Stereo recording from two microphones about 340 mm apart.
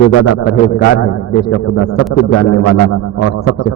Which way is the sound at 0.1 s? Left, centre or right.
Left.